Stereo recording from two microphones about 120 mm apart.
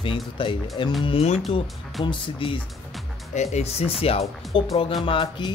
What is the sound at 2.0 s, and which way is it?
Speech, 45° left (ahead or behind).